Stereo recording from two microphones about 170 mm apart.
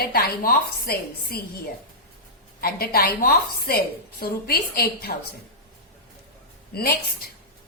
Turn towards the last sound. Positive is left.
turn(degrees=65)  # may be behind; listen again after turning